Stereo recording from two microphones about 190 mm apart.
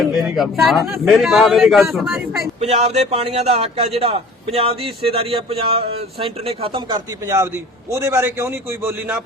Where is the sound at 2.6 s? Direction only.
35° right (ahead or behind).